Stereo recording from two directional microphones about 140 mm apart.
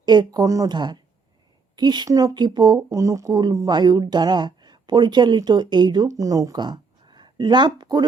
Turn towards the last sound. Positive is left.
turn(degrees=-30)  # may be behind; listen again after turning